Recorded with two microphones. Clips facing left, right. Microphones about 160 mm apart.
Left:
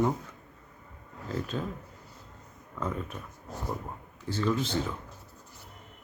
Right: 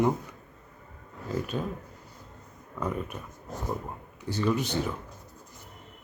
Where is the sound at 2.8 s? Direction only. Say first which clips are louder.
Right 2 dB; 15° right (ahead or behind).